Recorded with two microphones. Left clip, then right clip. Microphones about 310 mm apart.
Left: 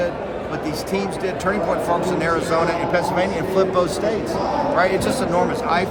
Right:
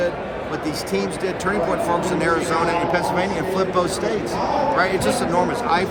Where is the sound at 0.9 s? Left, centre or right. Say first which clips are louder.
Even; centre.